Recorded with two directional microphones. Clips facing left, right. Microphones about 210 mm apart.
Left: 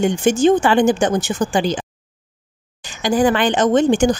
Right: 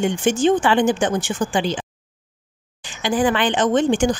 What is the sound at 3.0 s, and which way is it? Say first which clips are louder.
A woman's voice: left 3 dB; 40° left (ahead or behind).